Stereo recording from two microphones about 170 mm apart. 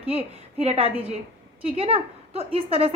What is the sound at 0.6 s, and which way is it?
A woman's voice, 40° right (ahead or behind).